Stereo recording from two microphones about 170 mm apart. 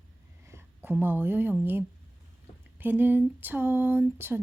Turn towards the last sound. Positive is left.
turn(degrees=-10)  # may be behind; listen again after turning